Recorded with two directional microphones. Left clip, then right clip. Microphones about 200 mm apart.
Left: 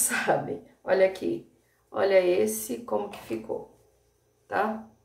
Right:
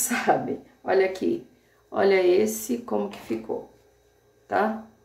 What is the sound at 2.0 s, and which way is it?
Speech, 30° right (ahead or behind).